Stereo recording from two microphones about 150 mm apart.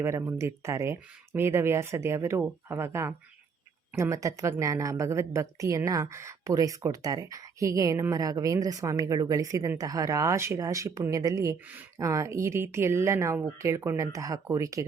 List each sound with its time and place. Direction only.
0.0 s speech: 20° right (ahead or behind)